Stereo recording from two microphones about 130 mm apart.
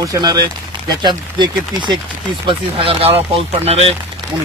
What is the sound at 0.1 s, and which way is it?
Speech, 30° right (ahead or behind).